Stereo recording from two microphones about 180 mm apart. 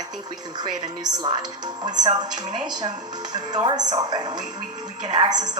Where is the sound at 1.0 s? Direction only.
25° right (ahead or behind).